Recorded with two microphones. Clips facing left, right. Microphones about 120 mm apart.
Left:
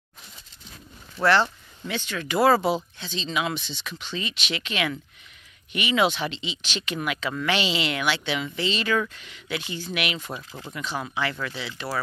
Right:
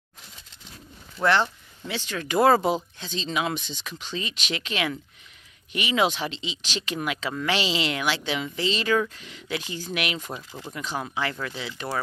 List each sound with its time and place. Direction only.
1.2 s speech: 15° right (ahead or behind)
1.9 s speech: 35° right (ahead or behind)
2.3 s speech: 25° right (ahead or behind)
3.0 s speech: 40° right (ahead or behind); by 11.7 s 25° right (ahead or behind)